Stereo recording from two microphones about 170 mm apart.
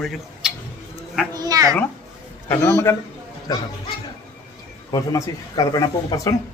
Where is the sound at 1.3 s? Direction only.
20° right (ahead or behind).